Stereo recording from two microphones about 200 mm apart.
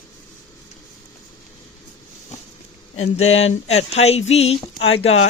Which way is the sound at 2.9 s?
30° left (ahead or behind).